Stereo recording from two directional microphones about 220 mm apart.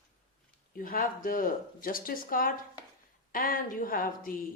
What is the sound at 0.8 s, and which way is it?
A woman's voice, 40° left (ahead or behind).